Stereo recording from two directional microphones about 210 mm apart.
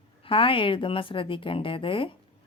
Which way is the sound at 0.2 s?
25° left (ahead or behind).